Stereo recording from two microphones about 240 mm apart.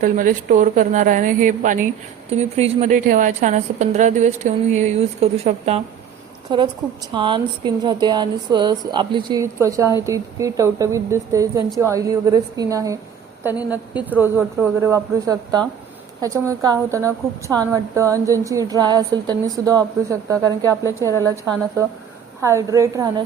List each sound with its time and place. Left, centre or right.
0.0 s a woman's voice: right; by 20.7 s centre
22.4 s speech: centre